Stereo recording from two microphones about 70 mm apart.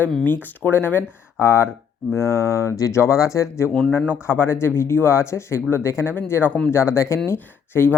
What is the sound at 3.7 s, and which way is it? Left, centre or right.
Speech, centre.